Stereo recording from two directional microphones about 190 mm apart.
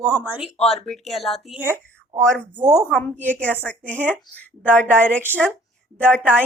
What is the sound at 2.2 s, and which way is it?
A woman's voice, 5° left (ahead or behind).